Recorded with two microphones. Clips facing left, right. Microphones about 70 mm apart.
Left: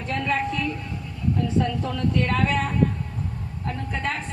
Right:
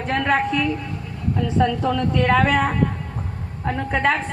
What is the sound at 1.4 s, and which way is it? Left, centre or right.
A man's voice, right.